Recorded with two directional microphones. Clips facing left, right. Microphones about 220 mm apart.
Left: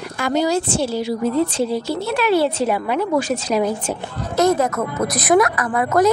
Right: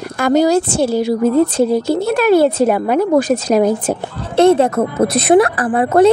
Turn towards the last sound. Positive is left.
turn(degrees=-30)  # may be behind; listen again after turning